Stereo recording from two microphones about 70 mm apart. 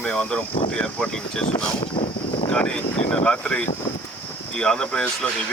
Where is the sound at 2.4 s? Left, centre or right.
Centre.